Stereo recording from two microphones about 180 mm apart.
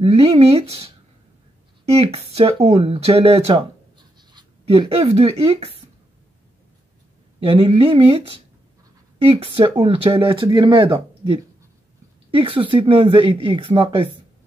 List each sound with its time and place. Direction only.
0.0 s speech: 30° right (ahead or behind)
1.9 s speech: 35° right (ahead or behind)
7.3 s speech: 30° right (ahead or behind)